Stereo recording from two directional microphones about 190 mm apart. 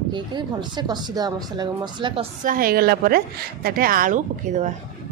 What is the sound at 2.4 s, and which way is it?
A woman's voice, 50° right (ahead or behind).